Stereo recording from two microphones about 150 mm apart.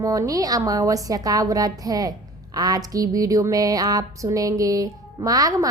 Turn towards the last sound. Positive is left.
turn(degrees=-25)  # may be behind; listen again after turning